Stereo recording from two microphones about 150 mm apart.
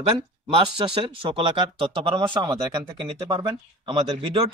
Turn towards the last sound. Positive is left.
turn(degrees=-35)  # may be behind; listen again after turning